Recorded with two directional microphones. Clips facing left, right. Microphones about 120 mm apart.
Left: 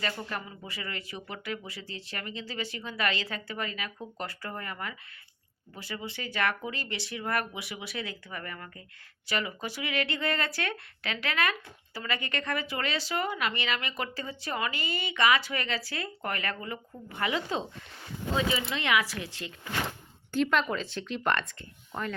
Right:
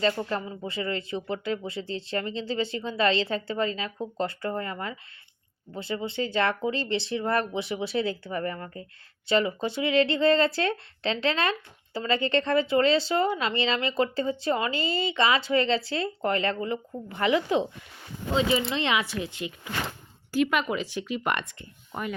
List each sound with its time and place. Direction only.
0.0 s speech: 30° right (ahead or behind)
18.5 s speech: 25° right (ahead or behind)